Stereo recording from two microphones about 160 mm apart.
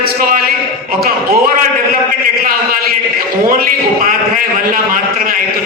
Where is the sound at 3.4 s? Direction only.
60° right (ahead or behind).